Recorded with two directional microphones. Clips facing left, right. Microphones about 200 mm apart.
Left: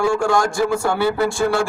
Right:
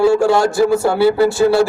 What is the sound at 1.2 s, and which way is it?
Speech, 5° right (ahead or behind).